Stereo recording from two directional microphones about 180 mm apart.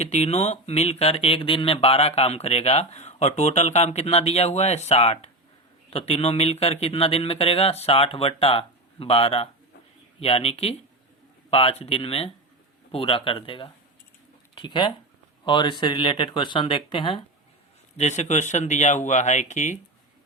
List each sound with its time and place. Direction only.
0.0 s speech: 35° left (ahead or behind)
17.9 s speech: 40° left (ahead or behind)